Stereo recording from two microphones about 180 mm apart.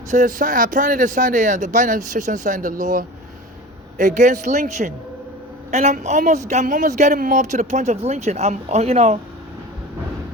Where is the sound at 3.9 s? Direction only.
45° right (ahead or behind).